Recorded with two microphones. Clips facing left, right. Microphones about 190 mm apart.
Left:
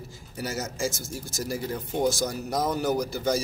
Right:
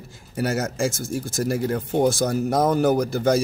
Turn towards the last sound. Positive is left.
turn(degrees=-55)  # may be behind; listen again after turning